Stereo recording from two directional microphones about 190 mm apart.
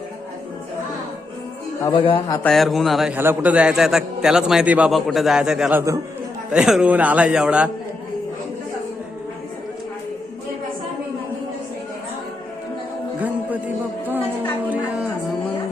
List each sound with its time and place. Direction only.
1.9 s a man's voice: 25° left (ahead or behind)
2.4 s a man's voice: centre (ahead or behind)
13.1 s music: 10° right (ahead or behind)